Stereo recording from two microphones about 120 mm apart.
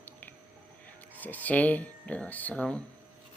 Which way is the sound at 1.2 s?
15° left (ahead or behind).